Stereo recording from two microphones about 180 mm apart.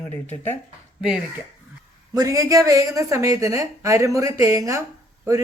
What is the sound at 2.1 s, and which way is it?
A woman's voice, 20° right (ahead or behind).